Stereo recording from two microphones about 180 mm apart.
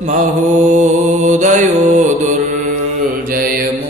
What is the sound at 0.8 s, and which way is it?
Mantra, 40° right (ahead or behind).